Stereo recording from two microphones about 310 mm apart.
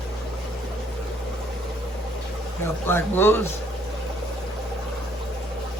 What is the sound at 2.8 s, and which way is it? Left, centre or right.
Speech, centre.